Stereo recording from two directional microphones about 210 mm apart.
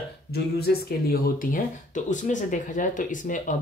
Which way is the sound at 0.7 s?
50° left (ahead or behind).